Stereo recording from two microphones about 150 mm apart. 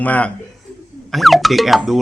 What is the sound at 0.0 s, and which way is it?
Speech, 10° left (ahead or behind).